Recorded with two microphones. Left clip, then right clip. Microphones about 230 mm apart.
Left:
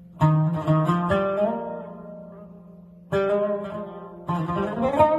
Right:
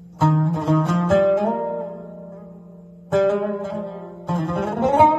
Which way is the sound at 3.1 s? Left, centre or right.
Left.